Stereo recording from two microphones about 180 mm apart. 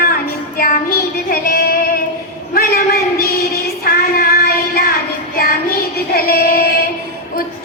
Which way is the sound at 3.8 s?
55° left (ahead or behind).